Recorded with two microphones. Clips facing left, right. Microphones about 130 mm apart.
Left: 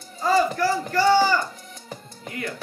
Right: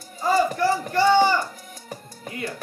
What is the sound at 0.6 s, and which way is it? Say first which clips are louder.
Speech: right 1 dB; 25° right (ahead or behind).